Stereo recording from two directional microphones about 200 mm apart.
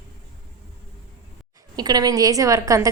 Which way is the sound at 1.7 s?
20° right (ahead or behind).